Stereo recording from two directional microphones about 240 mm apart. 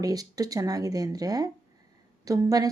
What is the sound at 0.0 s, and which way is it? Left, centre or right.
Speech, centre.